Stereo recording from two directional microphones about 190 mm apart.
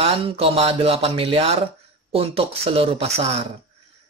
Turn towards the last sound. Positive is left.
turn(degrees=-35)  # may be behind; listen again after turning